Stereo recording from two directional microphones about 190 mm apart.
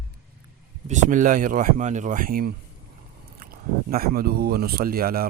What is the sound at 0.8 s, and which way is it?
Speech, 40° right (ahead or behind).